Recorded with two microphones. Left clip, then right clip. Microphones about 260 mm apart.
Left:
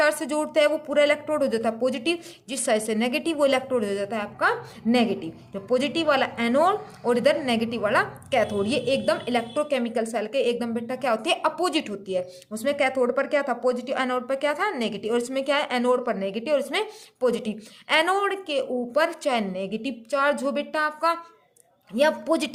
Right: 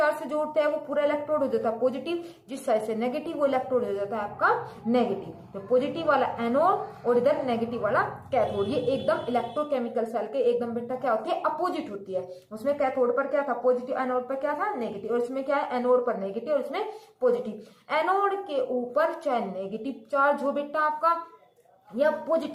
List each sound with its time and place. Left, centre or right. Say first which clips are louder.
0.5 s a woman's voice: left 6 dB; left
12.6 s a woman's voice: left 2 dB; left